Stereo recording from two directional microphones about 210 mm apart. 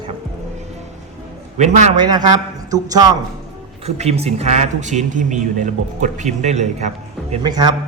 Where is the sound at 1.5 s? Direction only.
35° right (ahead or behind).